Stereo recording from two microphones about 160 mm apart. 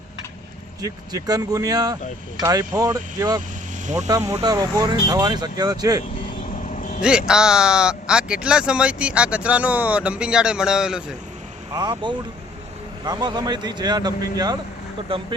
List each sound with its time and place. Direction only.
0.8 s a man's voice: 25° right (ahead or behind)
6.7 s vehicle: 50° left (ahead or behind)
7.0 s speech: 5° right (ahead or behind)
11.7 s a man's voice: 25° right (ahead or behind)